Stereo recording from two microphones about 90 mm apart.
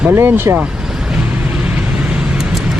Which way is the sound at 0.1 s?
25° right (ahead or behind).